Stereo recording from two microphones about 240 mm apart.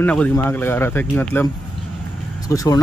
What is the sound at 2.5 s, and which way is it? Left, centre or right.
Speech, centre.